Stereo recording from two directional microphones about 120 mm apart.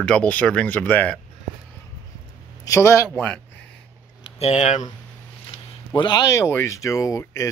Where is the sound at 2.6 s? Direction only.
25° left (ahead or behind).